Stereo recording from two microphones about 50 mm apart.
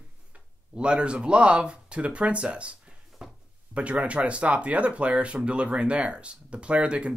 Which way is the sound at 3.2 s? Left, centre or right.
Centre.